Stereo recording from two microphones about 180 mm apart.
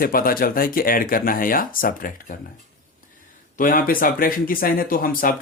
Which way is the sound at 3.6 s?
50° left (ahead or behind).